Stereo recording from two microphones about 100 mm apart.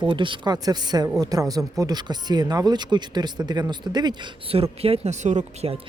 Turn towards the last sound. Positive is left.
turn(degrees=-60)  # may be behind; listen again after turning